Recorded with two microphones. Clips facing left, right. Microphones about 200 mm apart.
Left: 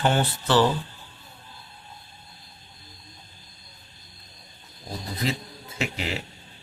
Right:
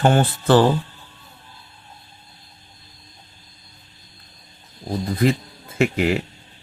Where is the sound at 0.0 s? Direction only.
50° right (ahead or behind).